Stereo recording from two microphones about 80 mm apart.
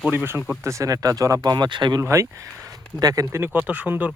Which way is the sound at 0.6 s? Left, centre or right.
Right.